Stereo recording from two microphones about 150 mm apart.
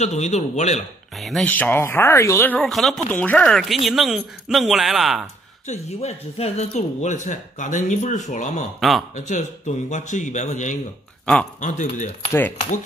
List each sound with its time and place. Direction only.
0.0 s speech: 50° left (ahead or behind)
1.2 s speech: 5° left (ahead or behind)
2.6 s speech: centre (ahead or behind)
5.7 s speech: 45° left (ahead or behind)
8.7 s speech: centre (ahead or behind)
9.1 s speech: 55° left (ahead or behind)
12.3 s speech: 15° left (ahead or behind)